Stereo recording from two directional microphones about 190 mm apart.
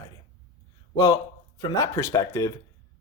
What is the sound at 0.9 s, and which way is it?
Speech, 20° left (ahead or behind).